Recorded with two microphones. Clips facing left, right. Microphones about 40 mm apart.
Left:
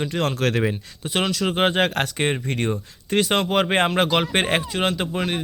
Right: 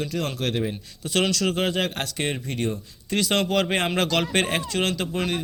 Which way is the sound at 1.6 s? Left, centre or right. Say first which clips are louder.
Left 5 dB; left.